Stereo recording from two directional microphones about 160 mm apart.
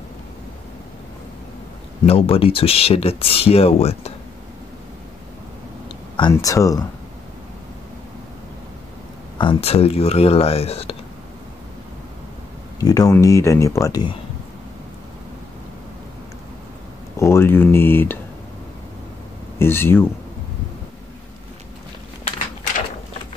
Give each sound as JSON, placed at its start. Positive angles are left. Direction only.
{"t": 2.0, "sound": "speech", "side_deg": 35}
{"t": 5.9, "sound": "a sound", "side_deg": 30}
{"t": 6.3, "sound": "speech", "side_deg": 20}
{"t": 9.4, "sound": "speech", "side_deg": 35}
{"t": 12.7, "sound": "speech", "side_deg": 20}
{"t": 17.2, "sound": "speech", "side_deg": 15}
{"t": 19.6, "sound": "speech", "side_deg": 15}